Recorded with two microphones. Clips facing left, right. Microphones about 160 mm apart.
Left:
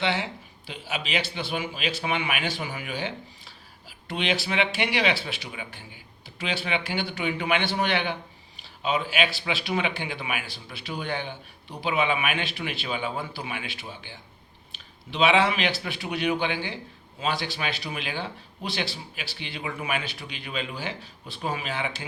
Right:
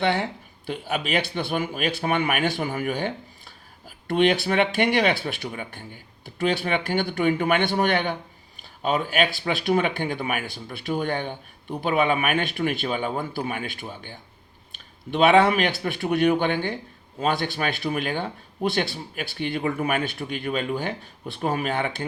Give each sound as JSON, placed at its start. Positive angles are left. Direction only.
{"t": 0.0, "sound": "speech", "side_deg": -50}